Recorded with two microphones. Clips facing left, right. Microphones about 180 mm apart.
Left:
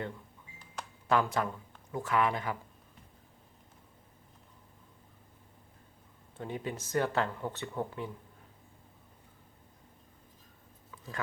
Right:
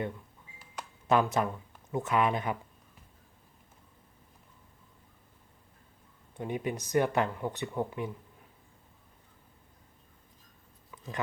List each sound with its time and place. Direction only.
1.0 s speech: 20° right (ahead or behind)
6.3 s speech: 15° right (ahead or behind)
10.9 s a sound: 20° right (ahead or behind)